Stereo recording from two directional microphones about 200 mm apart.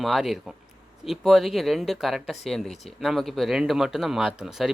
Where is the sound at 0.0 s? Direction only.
Centre (ahead or behind).